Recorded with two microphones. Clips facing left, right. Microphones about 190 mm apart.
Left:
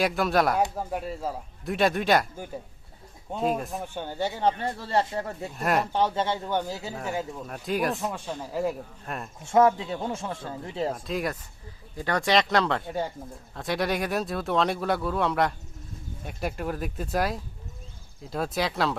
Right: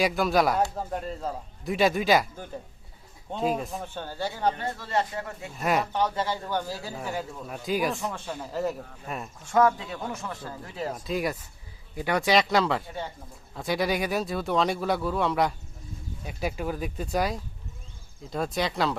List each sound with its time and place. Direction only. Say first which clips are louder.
0.0 s speech: even; centre (ahead or behind)
3.3 s speech: left 1 dB; centre (ahead or behind)
3.8 s speech: left 3 dB; 15° left (ahead or behind)
4.6 s speech: left 2 dB; 30° left (ahead or behind)
5.5 s speech: even; centre (ahead or behind)
5.9 s speech: left 2 dB; 25° left (ahead or behind)
7.4 s speech: right 1 dB; centre (ahead or behind)
8.1 s speech: left 1 dB; 10° left (ahead or behind)
9.0 s speech: right 1 dB; centre (ahead or behind)
9.4 s speech: left 2 dB; 25° left (ahead or behind)
10.9 s speech: right 1 dB; centre (ahead or behind)